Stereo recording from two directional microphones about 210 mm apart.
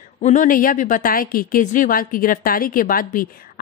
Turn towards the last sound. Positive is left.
turn(degrees=40)  # may be behind; listen again after turning